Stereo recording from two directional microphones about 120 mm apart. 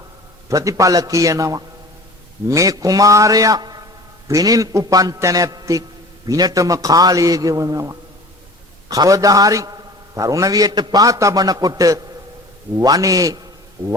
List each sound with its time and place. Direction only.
0.4 s a man's voice: 25° right (ahead or behind)